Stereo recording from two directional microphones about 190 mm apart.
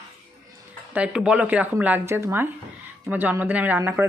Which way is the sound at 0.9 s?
5° right (ahead or behind).